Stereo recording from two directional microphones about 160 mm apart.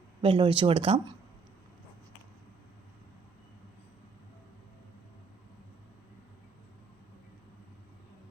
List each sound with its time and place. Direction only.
0.2 s speech: 35° right (ahead or behind)